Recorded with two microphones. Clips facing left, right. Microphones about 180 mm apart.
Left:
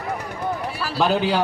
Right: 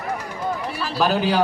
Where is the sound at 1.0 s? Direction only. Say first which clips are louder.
Even; 20° left (ahead or behind).